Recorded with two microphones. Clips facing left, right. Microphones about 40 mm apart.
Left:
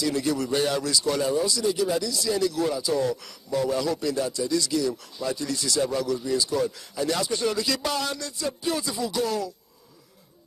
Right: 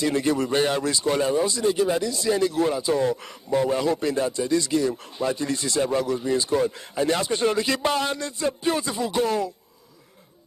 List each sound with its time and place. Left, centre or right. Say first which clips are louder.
0.0 s a man's voice: right 3 dB; right